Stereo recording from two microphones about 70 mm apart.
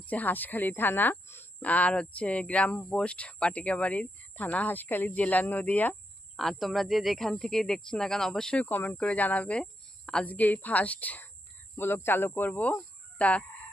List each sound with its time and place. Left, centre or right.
0.0 s speech: left
6.3 s speech: centre
8.6 s speech: left
9.6 s a sound: centre
10.2 s speech: left